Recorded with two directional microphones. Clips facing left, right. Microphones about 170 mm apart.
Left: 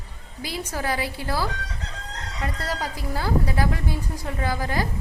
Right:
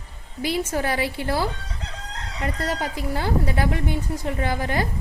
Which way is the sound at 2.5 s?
50° right (ahead or behind).